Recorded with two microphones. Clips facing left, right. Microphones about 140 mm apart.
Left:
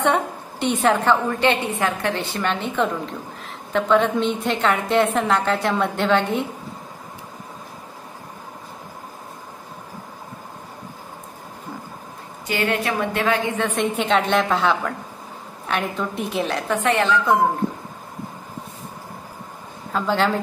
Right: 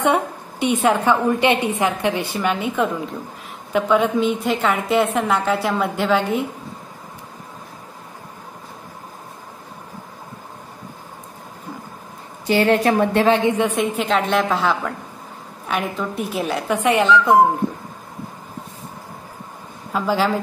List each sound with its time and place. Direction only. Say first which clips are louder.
0.0 s a sound: right 2 dB; 10° right (ahead or behind)
0.8 s a woman's voice: right 1 dB; 15° right (ahead or behind)
12.4 s a woman's voice: right 7 dB; 35° right (ahead or behind)
13.7 s a woman's voice: even; centre (ahead or behind)
19.9 s a woman's voice: right 1 dB; 5° right (ahead or behind)